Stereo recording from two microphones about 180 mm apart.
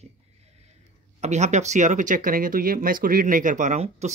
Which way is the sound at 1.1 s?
40° right (ahead or behind).